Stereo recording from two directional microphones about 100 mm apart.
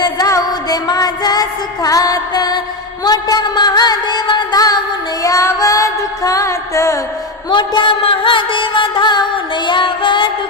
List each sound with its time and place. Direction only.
0.0 s music: 40° left (ahead or behind)
7.5 s music: 50° left (ahead or behind)